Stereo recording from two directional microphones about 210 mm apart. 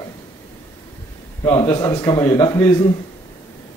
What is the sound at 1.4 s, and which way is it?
Speech, 10° left (ahead or behind).